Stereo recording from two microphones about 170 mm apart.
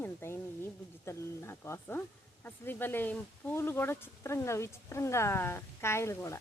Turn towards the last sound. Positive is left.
turn(degrees=15)  # may be behind; listen again after turning